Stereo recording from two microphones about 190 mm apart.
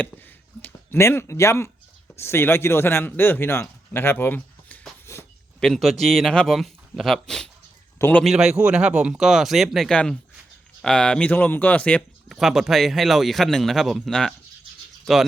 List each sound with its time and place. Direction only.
0.6 s a man's voice: 10° left (ahead or behind)
8.2 s speech: centre (ahead or behind)